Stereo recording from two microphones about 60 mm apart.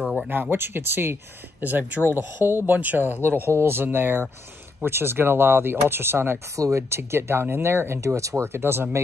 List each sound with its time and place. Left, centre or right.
0.3 s speech: right
6.5 s speech: right
7.0 s speech: right